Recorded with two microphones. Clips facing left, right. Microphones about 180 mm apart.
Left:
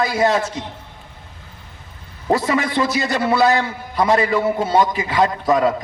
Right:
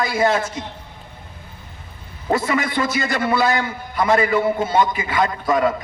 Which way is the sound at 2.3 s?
35° left (ahead or behind).